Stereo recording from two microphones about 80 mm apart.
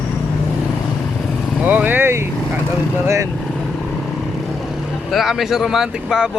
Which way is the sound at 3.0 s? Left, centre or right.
Right.